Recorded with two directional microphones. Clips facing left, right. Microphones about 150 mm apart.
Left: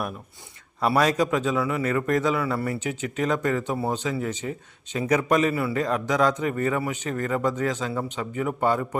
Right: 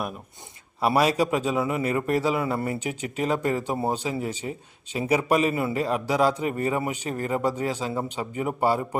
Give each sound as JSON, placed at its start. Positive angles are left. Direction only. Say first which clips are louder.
{"t": 0.8, "sound": "speech", "louder": "even", "side_deg": -10}
{"t": 2.7, "sound": "speech", "louder": "left 1 dB", "side_deg": -10}
{"t": 4.4, "sound": "speech", "louder": "left 1 dB", "side_deg": -20}
{"t": 4.9, "sound": "speech", "louder": "even", "side_deg": -10}